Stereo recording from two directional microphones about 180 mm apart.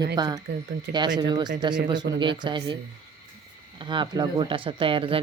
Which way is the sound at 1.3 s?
25° right (ahead or behind).